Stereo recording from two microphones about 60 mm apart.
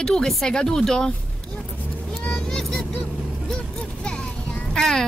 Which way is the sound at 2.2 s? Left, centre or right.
Centre.